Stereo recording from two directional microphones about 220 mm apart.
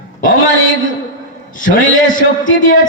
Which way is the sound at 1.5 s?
35° left (ahead or behind).